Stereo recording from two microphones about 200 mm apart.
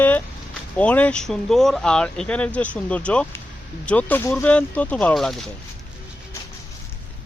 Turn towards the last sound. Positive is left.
turn(degrees=0)  # may be behind; listen again after turning